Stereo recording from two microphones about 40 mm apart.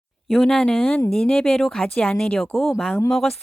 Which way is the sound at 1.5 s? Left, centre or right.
Centre.